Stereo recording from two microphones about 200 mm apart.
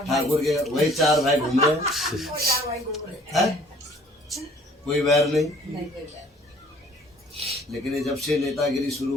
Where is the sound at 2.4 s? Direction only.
50° right (ahead or behind).